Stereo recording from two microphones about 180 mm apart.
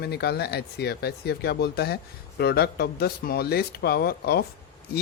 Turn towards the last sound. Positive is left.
turn(degrees=60)  # may be behind; listen again after turning